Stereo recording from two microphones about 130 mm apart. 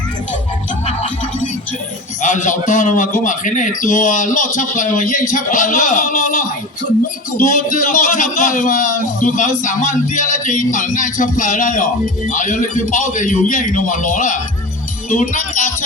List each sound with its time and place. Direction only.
2.2 s a man's voice: 70° left (ahead or behind)
7.3 s a man's voice: 90° left; by 15.7 s 70° left (ahead or behind)